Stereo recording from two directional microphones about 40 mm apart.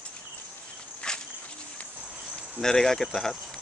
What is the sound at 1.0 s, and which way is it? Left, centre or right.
Walk, left.